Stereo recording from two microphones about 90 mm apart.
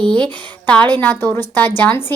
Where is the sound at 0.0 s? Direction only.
10° left (ahead or behind).